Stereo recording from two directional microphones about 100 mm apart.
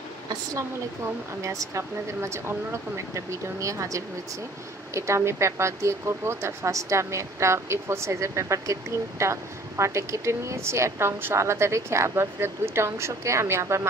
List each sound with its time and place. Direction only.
1.4 s speech: 30° right (ahead or behind)